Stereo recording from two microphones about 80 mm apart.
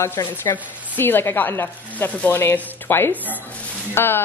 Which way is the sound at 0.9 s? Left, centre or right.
Left.